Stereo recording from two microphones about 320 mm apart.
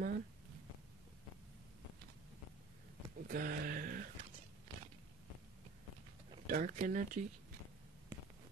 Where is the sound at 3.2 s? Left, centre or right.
Right.